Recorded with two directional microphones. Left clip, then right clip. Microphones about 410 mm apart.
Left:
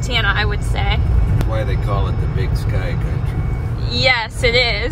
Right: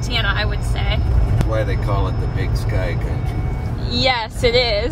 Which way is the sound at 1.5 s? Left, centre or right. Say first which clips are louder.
Right 1 dB; right.